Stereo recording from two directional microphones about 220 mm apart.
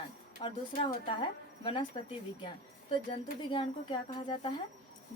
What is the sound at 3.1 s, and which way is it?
Speech, 20° left (ahead or behind).